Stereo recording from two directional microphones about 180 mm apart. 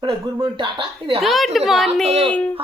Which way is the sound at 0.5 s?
25° right (ahead or behind).